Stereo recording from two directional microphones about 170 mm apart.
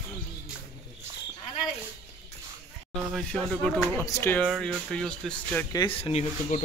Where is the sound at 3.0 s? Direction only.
Centre (ahead or behind).